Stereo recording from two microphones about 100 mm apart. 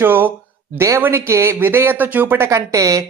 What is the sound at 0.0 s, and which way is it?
A man's voice, 20° right (ahead or behind).